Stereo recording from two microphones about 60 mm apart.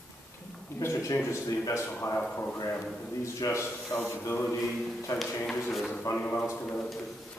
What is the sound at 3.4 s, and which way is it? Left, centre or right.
Speech, left.